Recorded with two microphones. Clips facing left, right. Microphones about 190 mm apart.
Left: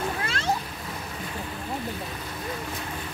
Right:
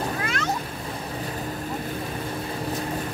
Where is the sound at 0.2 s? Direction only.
30° left (ahead or behind).